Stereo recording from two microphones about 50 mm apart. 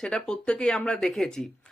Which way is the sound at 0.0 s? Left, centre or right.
Centre.